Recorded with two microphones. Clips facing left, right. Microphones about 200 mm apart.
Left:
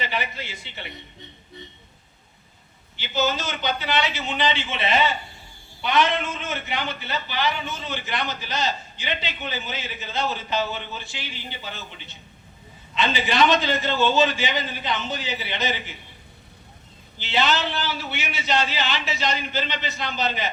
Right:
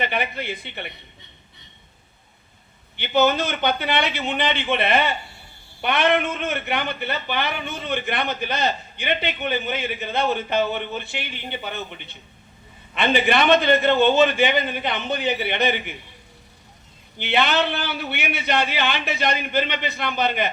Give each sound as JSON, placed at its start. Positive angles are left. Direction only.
{"t": 0.0, "sound": "a man's voice", "side_deg": -55}
{"t": 2.9, "sound": "a man's voice", "side_deg": -60}
{"t": 17.2, "sound": "a man's voice", "side_deg": -60}